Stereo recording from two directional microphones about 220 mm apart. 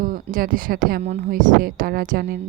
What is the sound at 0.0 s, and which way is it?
A woman's voice, 40° right (ahead or behind).